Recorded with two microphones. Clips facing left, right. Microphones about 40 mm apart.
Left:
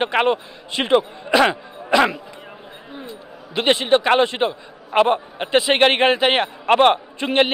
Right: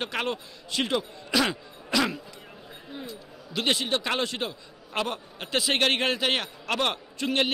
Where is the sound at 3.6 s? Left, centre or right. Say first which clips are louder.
Left 10 dB; left.